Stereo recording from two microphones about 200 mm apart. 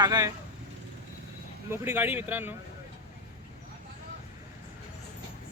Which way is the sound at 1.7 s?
10° right (ahead or behind).